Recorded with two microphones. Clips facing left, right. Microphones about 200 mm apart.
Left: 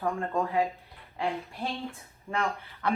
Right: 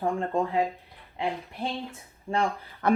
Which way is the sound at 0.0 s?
25° right (ahead or behind).